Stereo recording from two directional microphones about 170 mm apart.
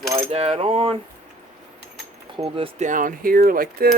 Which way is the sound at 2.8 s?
50° right (ahead or behind).